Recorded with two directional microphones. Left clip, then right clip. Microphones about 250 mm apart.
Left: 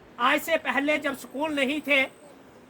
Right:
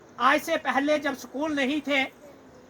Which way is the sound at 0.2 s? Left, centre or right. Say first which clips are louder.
Right 1 dB; centre.